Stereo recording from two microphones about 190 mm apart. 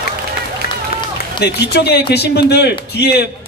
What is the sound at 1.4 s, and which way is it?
A man's voice, 60° left (ahead or behind).